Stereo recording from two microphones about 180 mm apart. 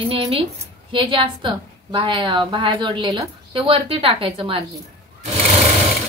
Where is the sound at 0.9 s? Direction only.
30° right (ahead or behind).